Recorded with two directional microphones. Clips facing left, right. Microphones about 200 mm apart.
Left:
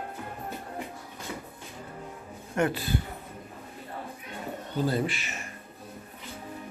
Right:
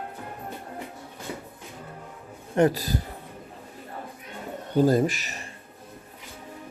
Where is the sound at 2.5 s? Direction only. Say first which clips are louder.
Right 5 dB; 35° right (ahead or behind).